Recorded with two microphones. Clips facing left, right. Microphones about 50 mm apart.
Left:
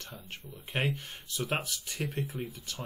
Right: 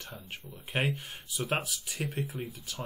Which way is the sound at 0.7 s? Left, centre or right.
Centre.